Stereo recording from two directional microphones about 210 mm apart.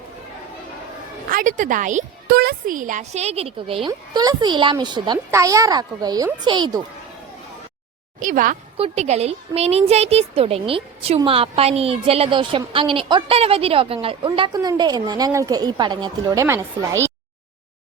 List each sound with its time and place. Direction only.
1.3 s speech: 40° right (ahead or behind); by 6.8 s 20° right (ahead or behind)
8.2 s a woman's voice: 40° right (ahead or behind); by 17.0 s 15° right (ahead or behind)